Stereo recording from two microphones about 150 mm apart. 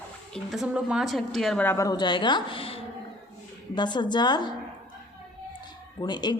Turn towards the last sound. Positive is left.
turn(degrees=30)  # may be behind; listen again after turning